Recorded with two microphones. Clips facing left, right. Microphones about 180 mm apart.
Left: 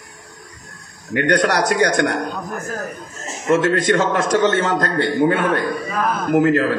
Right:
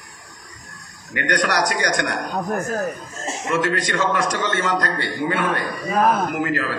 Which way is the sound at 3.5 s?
50° left (ahead or behind).